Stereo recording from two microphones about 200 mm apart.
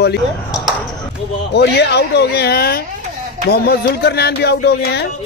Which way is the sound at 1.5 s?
55° left (ahead or behind).